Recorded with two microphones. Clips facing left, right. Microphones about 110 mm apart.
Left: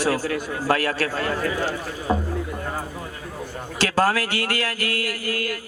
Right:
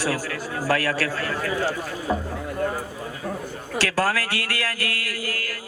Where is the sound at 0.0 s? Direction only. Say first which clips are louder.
Left 4 dB; 20° left (ahead or behind).